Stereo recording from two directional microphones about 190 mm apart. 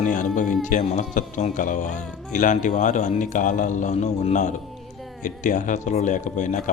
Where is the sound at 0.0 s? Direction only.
45° left (ahead or behind).